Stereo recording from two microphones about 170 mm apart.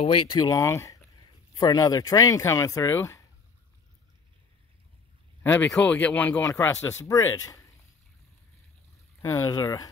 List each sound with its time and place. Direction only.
0.0 s speech: 25° left (ahead or behind)
5.4 s speech: 10° left (ahead or behind)
9.2 s speech: 20° left (ahead or behind)